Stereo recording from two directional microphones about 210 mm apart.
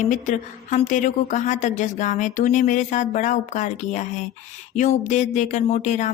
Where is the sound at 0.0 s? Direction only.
35° left (ahead or behind).